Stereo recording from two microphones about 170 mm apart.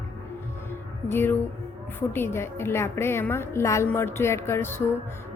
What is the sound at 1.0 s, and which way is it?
A woman's voice, 15° left (ahead or behind).